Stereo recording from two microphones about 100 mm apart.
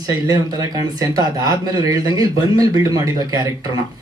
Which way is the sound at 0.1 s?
35° right (ahead or behind).